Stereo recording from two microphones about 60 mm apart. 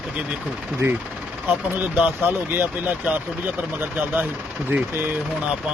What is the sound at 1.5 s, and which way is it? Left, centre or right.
Speech, right.